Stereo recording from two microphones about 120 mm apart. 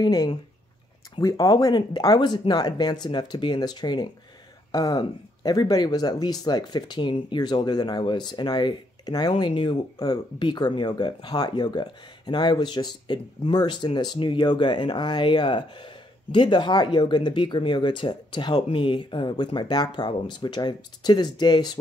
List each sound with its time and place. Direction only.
0.0 s speech: 35° left (ahead or behind)